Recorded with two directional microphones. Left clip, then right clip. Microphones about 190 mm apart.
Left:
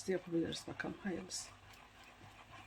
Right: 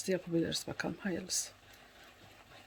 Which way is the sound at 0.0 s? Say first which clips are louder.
Right 4 dB; 45° right (ahead or behind).